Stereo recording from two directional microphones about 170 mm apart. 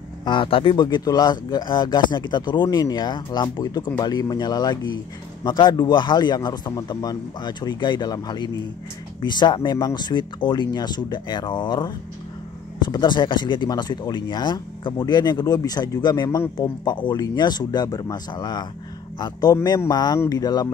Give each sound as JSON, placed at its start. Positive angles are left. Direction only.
{"t": 0.2, "sound": "speech", "side_deg": 30}